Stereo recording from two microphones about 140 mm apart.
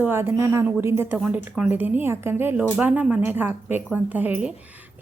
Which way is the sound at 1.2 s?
5° right (ahead or behind).